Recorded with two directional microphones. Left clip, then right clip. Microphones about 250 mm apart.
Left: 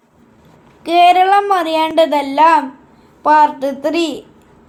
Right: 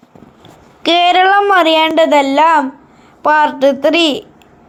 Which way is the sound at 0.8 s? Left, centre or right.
Right.